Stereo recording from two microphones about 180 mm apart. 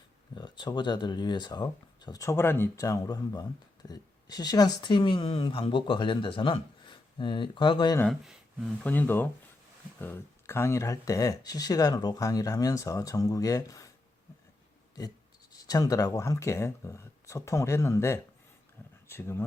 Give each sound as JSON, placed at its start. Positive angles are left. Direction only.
{"t": 0.3, "sound": "speech", "side_deg": 25}
{"t": 8.0, "sound": "speech", "side_deg": 0}
{"t": 15.6, "sound": "speech", "side_deg": 20}